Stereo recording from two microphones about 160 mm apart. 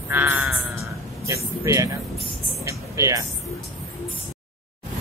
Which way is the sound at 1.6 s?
20° right (ahead or behind).